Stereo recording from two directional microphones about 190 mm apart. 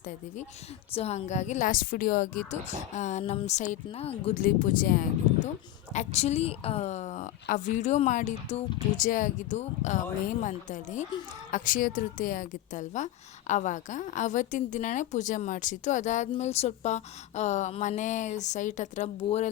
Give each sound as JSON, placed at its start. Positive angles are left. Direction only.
{"t": 0.0, "sound": "a woman's voice", "side_deg": 40}